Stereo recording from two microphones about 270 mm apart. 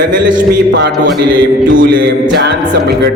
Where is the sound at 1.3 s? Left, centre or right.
Right.